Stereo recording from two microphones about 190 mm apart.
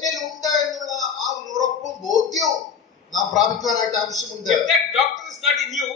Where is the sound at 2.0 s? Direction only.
20° left (ahead or behind).